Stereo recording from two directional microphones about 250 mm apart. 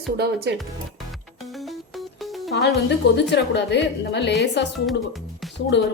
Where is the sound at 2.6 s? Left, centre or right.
Left.